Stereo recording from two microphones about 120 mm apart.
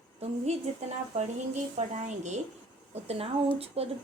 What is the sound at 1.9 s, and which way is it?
Speech, 75° right (ahead or behind).